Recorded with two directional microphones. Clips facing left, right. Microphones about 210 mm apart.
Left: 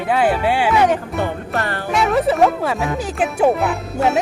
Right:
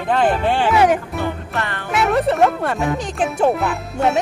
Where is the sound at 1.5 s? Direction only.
40° left (ahead or behind).